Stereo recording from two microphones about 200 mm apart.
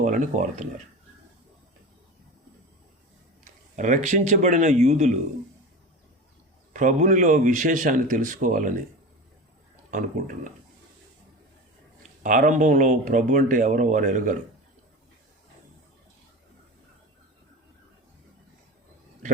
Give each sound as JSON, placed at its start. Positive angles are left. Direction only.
{"t": 0.0, "sound": "speech", "side_deg": -40}
{"t": 3.4, "sound": "a man's voice", "side_deg": -40}
{"t": 6.7, "sound": "speech", "side_deg": -40}
{"t": 9.9, "sound": "speech", "side_deg": -40}
{"t": 12.2, "sound": "speech", "side_deg": -40}